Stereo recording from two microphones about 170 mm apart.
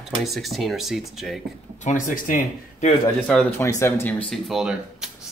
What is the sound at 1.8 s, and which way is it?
Speech, 50° left (ahead or behind).